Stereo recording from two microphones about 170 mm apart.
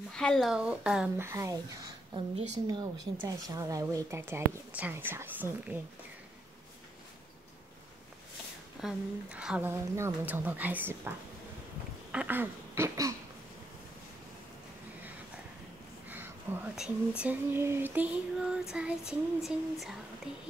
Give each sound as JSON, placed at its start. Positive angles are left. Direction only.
{"t": 0.1, "sound": "speech", "side_deg": 5}
{"t": 2.1, "sound": "a woman's voice", "side_deg": -40}
{"t": 2.6, "sound": "a woman's voice", "side_deg": -25}
{"t": 3.2, "sound": "child singing", "side_deg": -20}
{"t": 8.8, "sound": "child singing", "side_deg": -5}
{"t": 12.1, "sound": "throat clearing", "side_deg": -10}
{"t": 16.5, "sound": "child singing", "side_deg": -15}
{"t": 20.3, "sound": "speech", "side_deg": -5}